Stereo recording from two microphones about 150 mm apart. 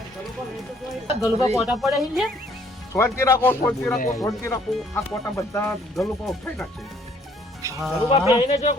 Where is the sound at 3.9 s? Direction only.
60° left (ahead or behind).